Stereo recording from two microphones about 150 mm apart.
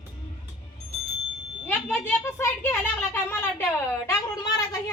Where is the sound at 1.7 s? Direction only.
15° left (ahead or behind).